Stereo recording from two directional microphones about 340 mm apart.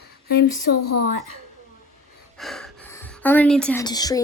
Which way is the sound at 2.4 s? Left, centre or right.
Centre.